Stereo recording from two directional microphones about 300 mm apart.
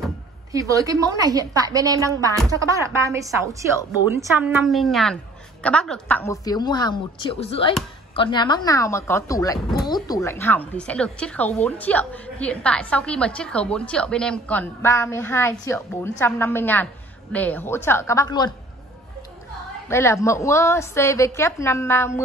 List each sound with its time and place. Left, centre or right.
0.5 s a woman's voice: centre
19.9 s a woman's voice: centre